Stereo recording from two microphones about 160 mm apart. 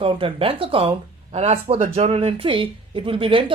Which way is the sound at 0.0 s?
35° right (ahead or behind).